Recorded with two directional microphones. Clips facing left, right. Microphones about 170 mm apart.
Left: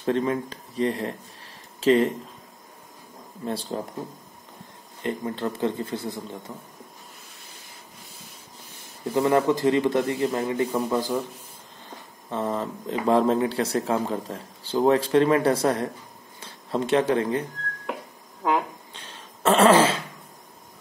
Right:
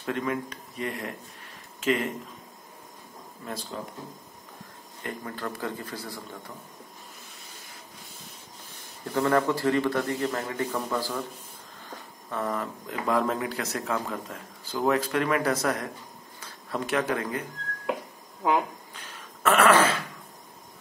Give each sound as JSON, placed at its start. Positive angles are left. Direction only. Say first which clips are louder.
{"t": 0.0, "sound": "speech", "louder": "left 5 dB", "side_deg": 30}
{"t": 3.4, "sound": "speech", "louder": "left 7 dB", "side_deg": 30}
{"t": 5.0, "sound": "speech", "louder": "left 7 dB", "side_deg": 25}
{"t": 9.0, "sound": "speech", "louder": "left 3 dB", "side_deg": 20}
{"t": 12.3, "sound": "speech", "louder": "left 3 dB", "side_deg": 25}
{"t": 18.9, "sound": "throat clearing", "louder": "left 1 dB", "side_deg": 30}